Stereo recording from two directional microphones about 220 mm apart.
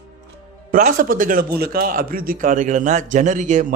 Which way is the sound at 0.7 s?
40° right (ahead or behind).